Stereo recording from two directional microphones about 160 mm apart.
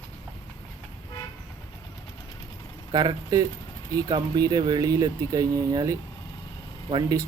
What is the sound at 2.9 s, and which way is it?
Speech, 25° right (ahead or behind).